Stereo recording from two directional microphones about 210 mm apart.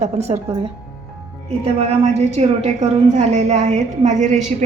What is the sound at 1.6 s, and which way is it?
A woman's voice, 30° right (ahead or behind).